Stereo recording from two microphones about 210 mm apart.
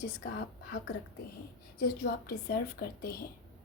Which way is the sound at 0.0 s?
45° left (ahead or behind).